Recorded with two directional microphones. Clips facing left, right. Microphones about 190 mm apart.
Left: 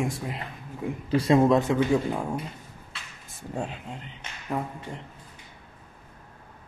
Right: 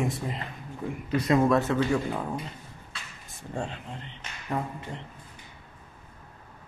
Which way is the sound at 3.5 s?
5° left (ahead or behind).